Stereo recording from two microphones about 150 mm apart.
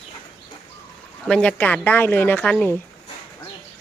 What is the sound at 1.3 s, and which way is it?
Speech, 5° left (ahead or behind).